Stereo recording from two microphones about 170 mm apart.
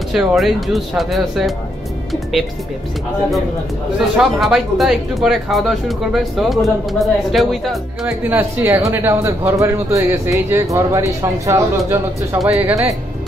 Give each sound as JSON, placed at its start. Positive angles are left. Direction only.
{"t": 0.1, "sound": "speech", "side_deg": 0}
{"t": 4.2, "sound": "speech", "side_deg": 0}
{"t": 12.4, "sound": "speech", "side_deg": 0}